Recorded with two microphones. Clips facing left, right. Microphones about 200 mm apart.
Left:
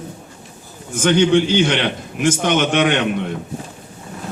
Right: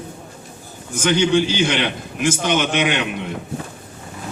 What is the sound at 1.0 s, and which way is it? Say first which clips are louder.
A man's voice: left 3 dB; 55° left (ahead or behind).